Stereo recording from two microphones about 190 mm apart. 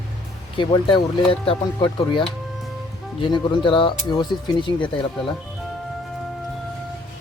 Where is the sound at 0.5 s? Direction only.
25° left (ahead or behind).